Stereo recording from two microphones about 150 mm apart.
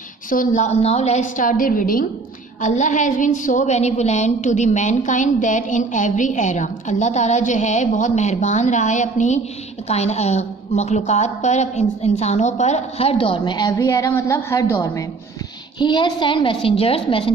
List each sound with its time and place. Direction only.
0.3 s a woman's voice: 60° left (ahead or behind)
2.6 s a woman's voice: 55° left (ahead or behind); by 15.0 s 20° left (ahead or behind)
15.8 s a woman's voice: 30° left (ahead or behind)